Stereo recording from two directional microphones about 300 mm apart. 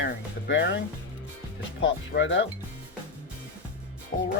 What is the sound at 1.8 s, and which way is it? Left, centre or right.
Speech, left.